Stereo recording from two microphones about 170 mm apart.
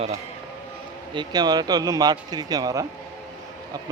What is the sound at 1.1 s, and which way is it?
Speech, 25° right (ahead or behind).